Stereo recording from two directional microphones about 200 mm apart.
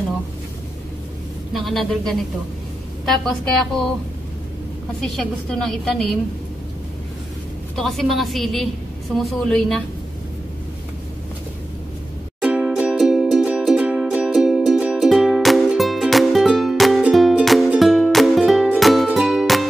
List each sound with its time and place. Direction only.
1.5 s a woman's voice: centre (ahead or behind)
5.0 s a woman's voice: centre (ahead or behind)
7.7 s a woman's voice: centre (ahead or behind)
12.4 s music: 5° right (ahead or behind)